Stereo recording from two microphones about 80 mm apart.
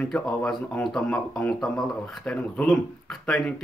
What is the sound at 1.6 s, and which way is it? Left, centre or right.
Speech, centre.